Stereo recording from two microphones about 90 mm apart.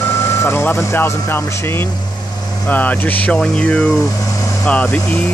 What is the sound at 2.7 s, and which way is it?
Speech, 15° left (ahead or behind).